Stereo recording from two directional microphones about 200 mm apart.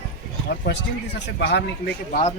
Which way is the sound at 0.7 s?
60° left (ahead or behind).